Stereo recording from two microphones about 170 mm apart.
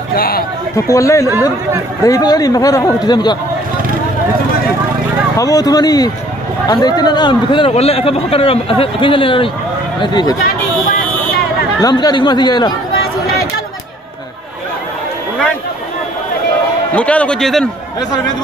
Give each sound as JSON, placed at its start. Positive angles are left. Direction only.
{"t": 0.1, "sound": "a sound", "side_deg": 60}
{"t": 0.8, "sound": "speech", "side_deg": 20}
{"t": 5.4, "sound": "a man's voice", "side_deg": 20}
{"t": 10.4, "sound": "a sound", "side_deg": 55}
{"t": 11.8, "sound": "speech", "side_deg": 25}
{"t": 16.9, "sound": "a man's voice", "side_deg": 5}